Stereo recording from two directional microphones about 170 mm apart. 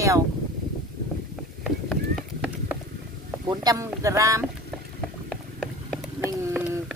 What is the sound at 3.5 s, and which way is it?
Speech, 20° right (ahead or behind).